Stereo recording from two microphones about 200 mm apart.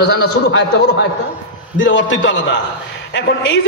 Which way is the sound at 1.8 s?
65° left (ahead or behind).